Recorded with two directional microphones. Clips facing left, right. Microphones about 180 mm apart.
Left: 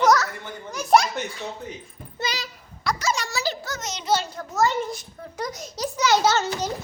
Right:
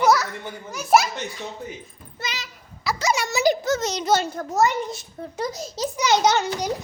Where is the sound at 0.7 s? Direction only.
5° right (ahead or behind).